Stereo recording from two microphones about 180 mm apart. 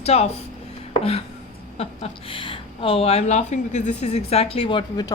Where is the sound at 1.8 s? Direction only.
35° left (ahead or behind).